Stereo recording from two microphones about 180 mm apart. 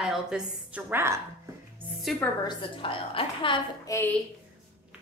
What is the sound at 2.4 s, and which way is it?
A woman's voice, 30° left (ahead or behind).